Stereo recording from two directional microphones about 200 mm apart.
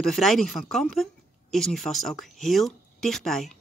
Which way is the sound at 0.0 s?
Centre (ahead or behind).